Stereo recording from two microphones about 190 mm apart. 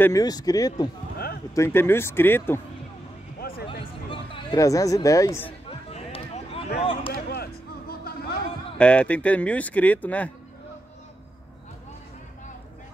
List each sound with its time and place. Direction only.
0.0 s speech: 20° left (ahead or behind)
1.1 s a sound: 55° left (ahead or behind)
1.5 s speech: 15° left (ahead or behind)
3.3 s music: 50° left (ahead or behind)
3.8 s a sound: 25° left (ahead or behind)
5.7 s a sound: 30° left (ahead or behind)
6.8 s speech: 30° left (ahead or behind)
7.1 s speech: 55° left (ahead or behind)
8.0 s music: 55° left (ahead or behind)
8.7 s speech: 5° left (ahead or behind)